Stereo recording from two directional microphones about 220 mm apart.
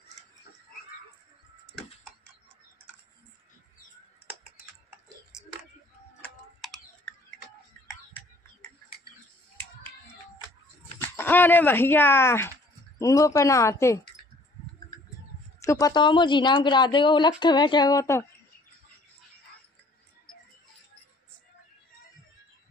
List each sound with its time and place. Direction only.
11.0 s speech: 10° left (ahead or behind)
15.6 s speech: 15° left (ahead or behind)